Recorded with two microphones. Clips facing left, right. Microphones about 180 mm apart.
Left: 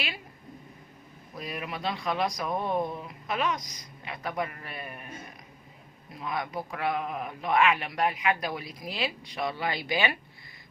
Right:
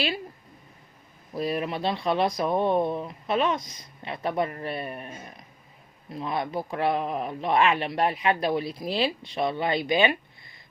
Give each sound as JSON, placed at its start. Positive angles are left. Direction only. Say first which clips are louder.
{"t": 1.4, "sound": "a man's voice", "louder": "right 8 dB", "side_deg": -30}
{"t": 6.1, "sound": "a man's voice", "louder": "right 4 dB", "side_deg": -30}